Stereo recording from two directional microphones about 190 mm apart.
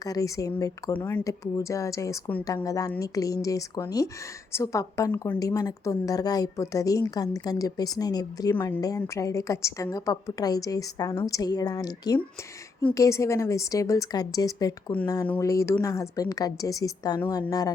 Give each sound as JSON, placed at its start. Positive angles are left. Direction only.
{"t": 0.0, "sound": "a woman's voice", "side_deg": 20}